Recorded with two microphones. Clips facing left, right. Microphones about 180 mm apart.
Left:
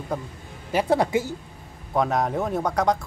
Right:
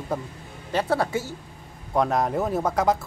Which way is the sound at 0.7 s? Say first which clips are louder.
Left 3 dB; 15° left (ahead or behind).